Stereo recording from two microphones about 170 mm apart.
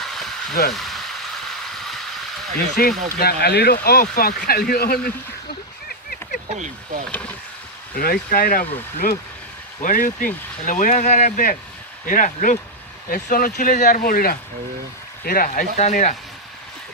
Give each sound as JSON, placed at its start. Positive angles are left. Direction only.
{"t": 0.0, "sound": "a sound", "side_deg": 0}
{"t": 2.8, "sound": "speech", "side_deg": 60}
{"t": 6.5, "sound": "speech", "side_deg": -45}
{"t": 7.9, "sound": "speech", "side_deg": 60}